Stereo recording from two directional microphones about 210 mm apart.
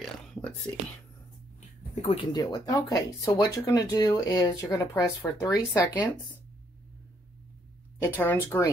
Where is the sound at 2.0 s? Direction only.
25° left (ahead or behind).